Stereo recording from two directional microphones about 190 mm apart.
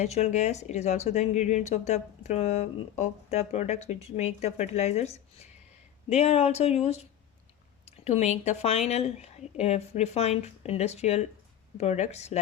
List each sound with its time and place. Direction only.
0.0 s speech: 35° left (ahead or behind)